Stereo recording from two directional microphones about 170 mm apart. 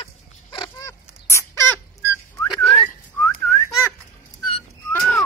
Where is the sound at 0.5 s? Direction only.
20° left (ahead or behind).